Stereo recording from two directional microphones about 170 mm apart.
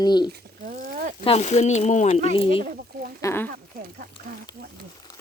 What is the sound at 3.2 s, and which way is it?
Speech, 15° left (ahead or behind).